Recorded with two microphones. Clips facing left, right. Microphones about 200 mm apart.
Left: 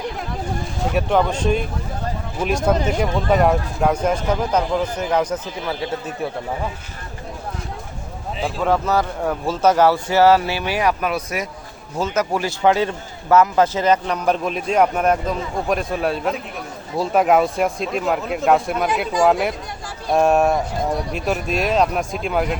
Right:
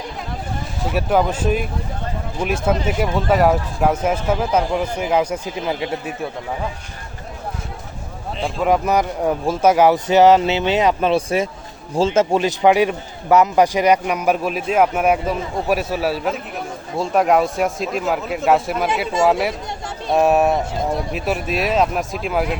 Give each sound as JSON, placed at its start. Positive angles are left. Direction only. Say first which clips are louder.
{"t": 0.9, "sound": "speech", "louder": "right 1 dB", "side_deg": -5}
{"t": 2.6, "sound": "speech", "louder": "even", "side_deg": -5}
{"t": 8.4, "sound": "a man's voice", "louder": "right 1 dB", "side_deg": 0}
{"t": 8.6, "sound": "a man's voice", "louder": "right 2 dB", "side_deg": -15}